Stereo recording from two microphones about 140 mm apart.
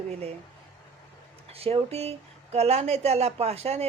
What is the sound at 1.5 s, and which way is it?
Speech, 45° right (ahead or behind).